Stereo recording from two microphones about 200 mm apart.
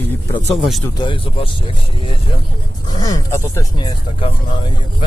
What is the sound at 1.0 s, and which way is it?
Speech, 25° left (ahead or behind).